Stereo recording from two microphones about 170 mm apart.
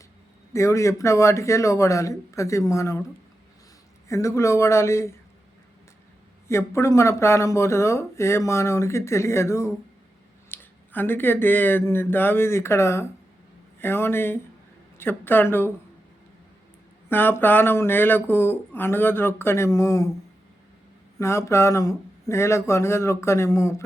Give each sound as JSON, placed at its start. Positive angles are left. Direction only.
{"t": 0.5, "sound": "speech", "side_deg": 15}
{"t": 4.1, "sound": "speech", "side_deg": 15}
{"t": 6.5, "sound": "speech", "side_deg": 15}
{"t": 17.1, "sound": "speech", "side_deg": 10}
{"t": 21.2, "sound": "speech", "side_deg": 15}